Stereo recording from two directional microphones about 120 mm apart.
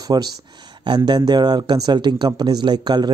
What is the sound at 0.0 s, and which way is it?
Speech, 35° right (ahead or behind).